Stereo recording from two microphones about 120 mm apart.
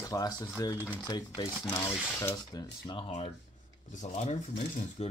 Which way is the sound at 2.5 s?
40° left (ahead or behind).